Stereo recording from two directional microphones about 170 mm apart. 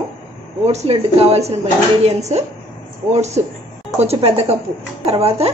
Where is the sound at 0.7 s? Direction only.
40° right (ahead or behind).